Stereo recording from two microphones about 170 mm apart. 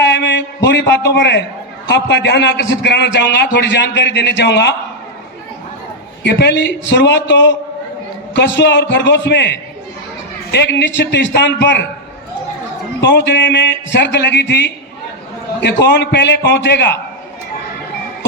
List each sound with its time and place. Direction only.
0.0 s a sound: 90° left
1.9 s a man's voice: 85° left
6.4 s a man's voice: 90° left
13.0 s a man's voice: 90° left